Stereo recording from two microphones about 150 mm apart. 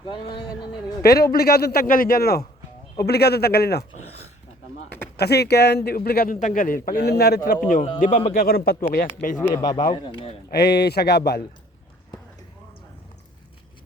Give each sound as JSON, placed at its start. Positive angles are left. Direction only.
{"t": 0.0, "sound": "speech", "side_deg": 35}
{"t": 1.0, "sound": "a man's voice", "side_deg": 90}
{"t": 5.1, "sound": "a man's voice", "side_deg": 90}
{"t": 7.9, "sound": "a man's voice", "side_deg": 60}
{"t": 8.3, "sound": "speech", "side_deg": 80}
{"t": 9.4, "sound": "speech", "side_deg": 15}
{"t": 9.6, "sound": "speech", "side_deg": 30}
{"t": 10.5, "sound": "a man's voice", "side_deg": 90}